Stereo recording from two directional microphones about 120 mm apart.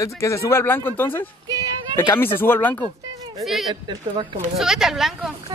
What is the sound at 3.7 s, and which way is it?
Speech, 40° right (ahead or behind).